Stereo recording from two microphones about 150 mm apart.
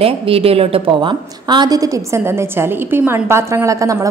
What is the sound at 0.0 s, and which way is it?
A woman's voice, 40° right (ahead or behind).